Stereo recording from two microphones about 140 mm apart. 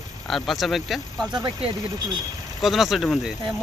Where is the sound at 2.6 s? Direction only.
Centre (ahead or behind).